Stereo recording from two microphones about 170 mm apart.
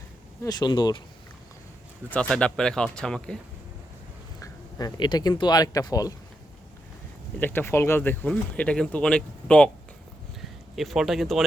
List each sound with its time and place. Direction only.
0.4 s speech: 25° left (ahead or behind)
2.0 s speech: 5° left (ahead or behind)
4.4 s speech: 25° left (ahead or behind)
7.3 s speech: 10° left (ahead or behind)